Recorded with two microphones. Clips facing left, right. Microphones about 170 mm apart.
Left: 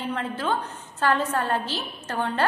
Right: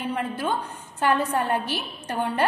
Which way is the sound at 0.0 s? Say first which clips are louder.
Right 1 dB; 10° right (ahead or behind).